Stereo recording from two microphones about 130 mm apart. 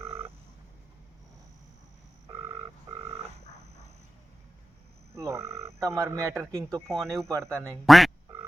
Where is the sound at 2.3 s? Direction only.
20° right (ahead or behind).